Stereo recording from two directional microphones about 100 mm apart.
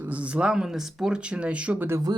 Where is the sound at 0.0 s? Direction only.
15° right (ahead or behind).